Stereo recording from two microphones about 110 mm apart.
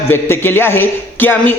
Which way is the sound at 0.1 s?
20° left (ahead or behind).